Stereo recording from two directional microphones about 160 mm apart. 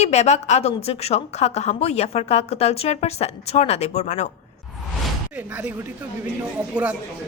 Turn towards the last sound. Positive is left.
turn(degrees=-10)  # may be behind; listen again after turning